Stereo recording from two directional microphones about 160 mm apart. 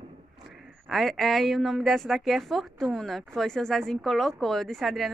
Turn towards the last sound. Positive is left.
turn(degrees=0)  # may be behind; listen again after turning